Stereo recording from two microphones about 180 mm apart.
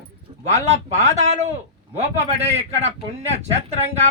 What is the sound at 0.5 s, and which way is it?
Speech, 40° right (ahead or behind).